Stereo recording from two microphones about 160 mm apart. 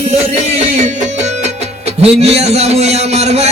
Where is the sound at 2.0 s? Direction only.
40° right (ahead or behind).